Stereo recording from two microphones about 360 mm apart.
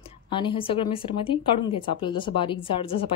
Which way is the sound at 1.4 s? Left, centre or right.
Centre.